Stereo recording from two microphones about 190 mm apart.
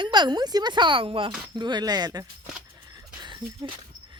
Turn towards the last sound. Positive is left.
turn(degrees=-25)  # may be behind; listen again after turning